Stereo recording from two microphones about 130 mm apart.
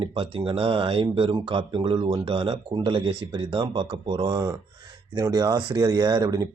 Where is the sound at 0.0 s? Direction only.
40° right (ahead or behind).